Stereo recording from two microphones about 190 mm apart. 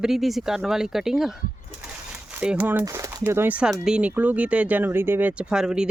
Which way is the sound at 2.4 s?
5° right (ahead or behind).